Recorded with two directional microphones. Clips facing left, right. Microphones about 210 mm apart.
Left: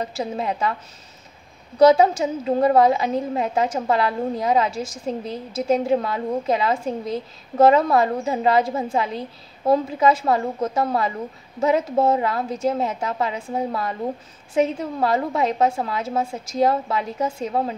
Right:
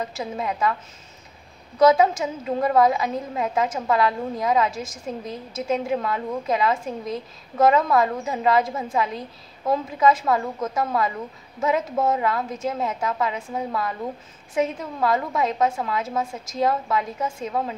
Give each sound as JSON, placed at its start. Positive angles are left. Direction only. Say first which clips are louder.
{"t": 0.0, "sound": "a woman's voice", "louder": "left 2 dB", "side_deg": 30}
{"t": 1.8, "sound": "a woman's voice", "louder": "left 3 dB", "side_deg": 30}